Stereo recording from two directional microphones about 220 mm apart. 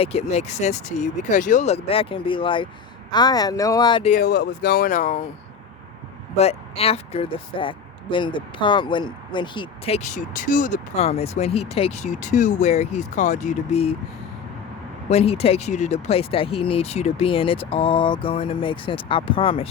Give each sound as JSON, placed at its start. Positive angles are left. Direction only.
{"t": 0.0, "sound": "speech", "side_deg": 30}
{"t": 4.1, "sound": "speech", "side_deg": 45}
{"t": 6.3, "sound": "speech", "side_deg": 30}
{"t": 15.1, "sound": "speech", "side_deg": 25}